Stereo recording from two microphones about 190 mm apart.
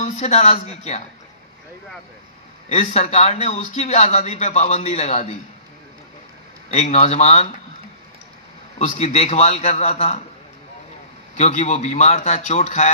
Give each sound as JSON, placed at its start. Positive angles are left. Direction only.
{"t": 0.0, "sound": "speech", "side_deg": 35}
{"t": 2.7, "sound": "speech", "side_deg": 35}
{"t": 6.7, "sound": "speech", "side_deg": 35}
{"t": 8.7, "sound": "speech", "side_deg": 35}
{"t": 11.3, "sound": "speech", "side_deg": 35}